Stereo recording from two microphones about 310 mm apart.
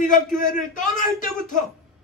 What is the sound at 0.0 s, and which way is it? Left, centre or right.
Speech, left.